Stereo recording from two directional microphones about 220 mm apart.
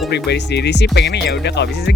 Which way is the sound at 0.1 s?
50° left (ahead or behind).